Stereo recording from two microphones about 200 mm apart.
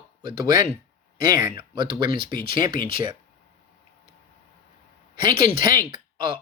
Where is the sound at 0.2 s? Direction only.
20° right (ahead or behind).